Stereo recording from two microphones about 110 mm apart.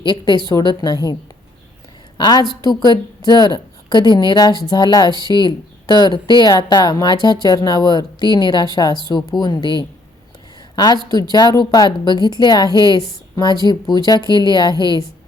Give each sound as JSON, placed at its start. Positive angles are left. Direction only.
{"t": 0.0, "sound": "a woman's voice", "side_deg": 45}
{"t": 2.1, "sound": "a woman's voice", "side_deg": 40}